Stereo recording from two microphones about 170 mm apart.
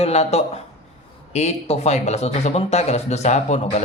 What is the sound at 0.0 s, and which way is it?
Speech, 40° left (ahead or behind).